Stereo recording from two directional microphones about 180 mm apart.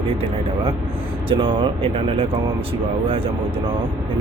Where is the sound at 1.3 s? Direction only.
30° right (ahead or behind).